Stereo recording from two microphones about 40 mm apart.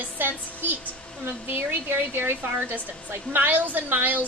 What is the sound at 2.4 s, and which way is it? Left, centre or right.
A woman's voice, right.